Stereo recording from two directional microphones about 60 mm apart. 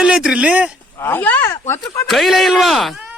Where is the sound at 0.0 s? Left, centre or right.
Centre.